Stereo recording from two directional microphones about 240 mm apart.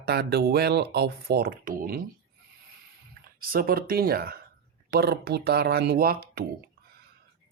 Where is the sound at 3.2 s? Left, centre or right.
Right.